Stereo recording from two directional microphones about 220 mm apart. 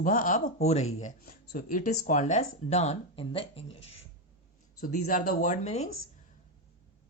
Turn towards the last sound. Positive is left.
turn(degrees=30)  # may be behind; listen again after turning